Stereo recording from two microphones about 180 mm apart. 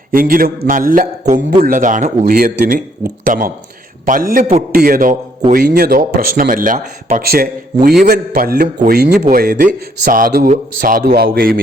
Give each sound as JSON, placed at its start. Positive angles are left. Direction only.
{"t": 0.1, "sound": "speech", "side_deg": -50}
{"t": 9.2, "sound": "speech", "side_deg": -50}